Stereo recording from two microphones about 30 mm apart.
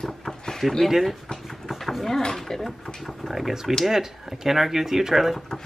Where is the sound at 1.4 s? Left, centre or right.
Centre.